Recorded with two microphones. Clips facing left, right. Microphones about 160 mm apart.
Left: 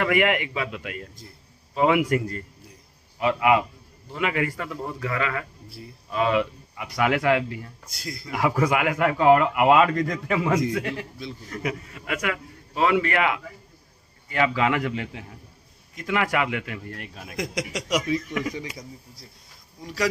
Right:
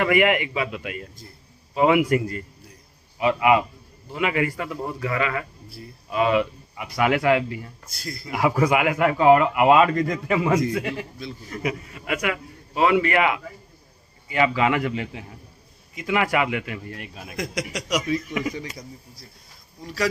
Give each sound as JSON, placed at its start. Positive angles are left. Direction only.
{"t": 0.0, "sound": "speech", "side_deg": -15}
{"t": 7.9, "sound": "speech", "side_deg": 20}
{"t": 8.3, "sound": "speech", "side_deg": -10}
{"t": 17.4, "sound": "speech", "side_deg": 20}
{"t": 18.2, "sound": "speech", "side_deg": -10}
{"t": 18.6, "sound": "speech", "side_deg": 20}